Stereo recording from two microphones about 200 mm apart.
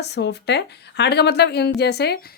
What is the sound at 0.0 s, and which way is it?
A woman's voice, 55° left (ahead or behind).